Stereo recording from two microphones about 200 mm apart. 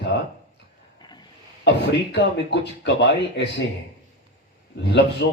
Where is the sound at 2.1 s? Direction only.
60° left (ahead or behind).